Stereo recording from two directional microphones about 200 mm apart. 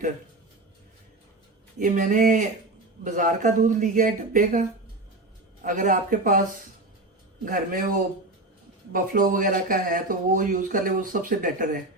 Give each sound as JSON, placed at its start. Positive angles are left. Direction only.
{"t": 1.8, "sound": "speech", "side_deg": -40}
{"t": 5.6, "sound": "speech", "side_deg": -40}
{"t": 7.4, "sound": "speech", "side_deg": -45}
{"t": 8.9, "sound": "speech", "side_deg": -45}